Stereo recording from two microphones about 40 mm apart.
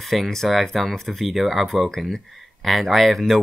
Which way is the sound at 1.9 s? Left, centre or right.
Centre.